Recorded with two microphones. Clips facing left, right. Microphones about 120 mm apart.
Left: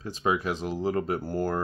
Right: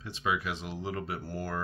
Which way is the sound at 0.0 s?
40° left (ahead or behind).